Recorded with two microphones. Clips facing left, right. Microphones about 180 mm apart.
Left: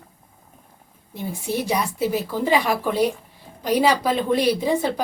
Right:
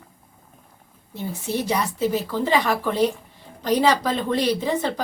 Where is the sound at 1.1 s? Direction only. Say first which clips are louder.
Left 1 dB; 15° left (ahead or behind).